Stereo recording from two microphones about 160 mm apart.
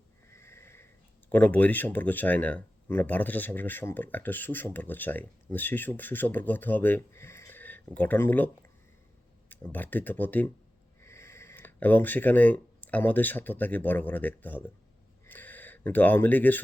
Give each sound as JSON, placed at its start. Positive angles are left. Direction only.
{"t": 0.3, "sound": "sniff", "side_deg": 15}
{"t": 1.3, "sound": "speech", "side_deg": 10}
{"t": 9.7, "sound": "speech", "side_deg": 10}
{"t": 15.3, "sound": "a sound", "side_deg": 10}